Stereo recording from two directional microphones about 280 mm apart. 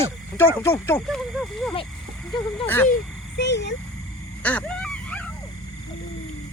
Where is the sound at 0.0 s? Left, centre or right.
Centre.